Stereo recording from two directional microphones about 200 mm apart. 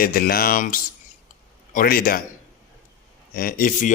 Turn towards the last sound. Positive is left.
turn(degrees=45)  # may be behind; listen again after turning